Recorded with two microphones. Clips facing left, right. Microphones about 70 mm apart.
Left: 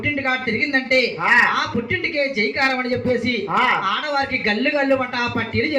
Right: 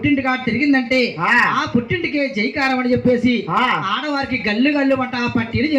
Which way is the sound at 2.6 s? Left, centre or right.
Centre.